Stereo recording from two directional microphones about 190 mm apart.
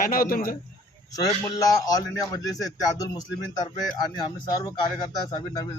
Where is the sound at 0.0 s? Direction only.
50° left (ahead or behind).